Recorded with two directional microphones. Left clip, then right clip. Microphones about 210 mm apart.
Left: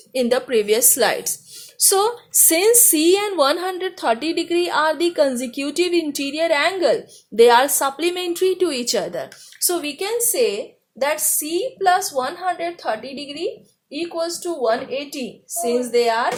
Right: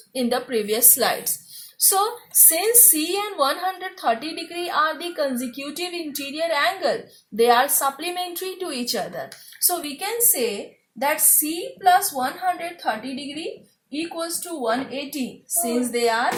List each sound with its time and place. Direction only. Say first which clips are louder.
0.1 s a woman's voice: left 5 dB; 50° left (ahead or behind)